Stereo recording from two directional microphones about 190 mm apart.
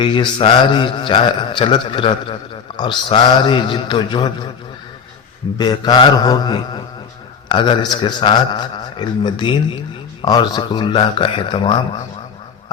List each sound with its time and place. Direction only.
0.0 s a man's voice: 25° left (ahead or behind)
5.5 s a man's voice: 20° left (ahead or behind)